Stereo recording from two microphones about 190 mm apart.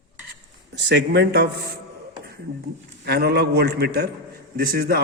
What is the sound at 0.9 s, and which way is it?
Speech, 65° right (ahead or behind).